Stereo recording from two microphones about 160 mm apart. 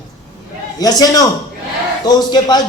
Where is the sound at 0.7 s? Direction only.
25° left (ahead or behind).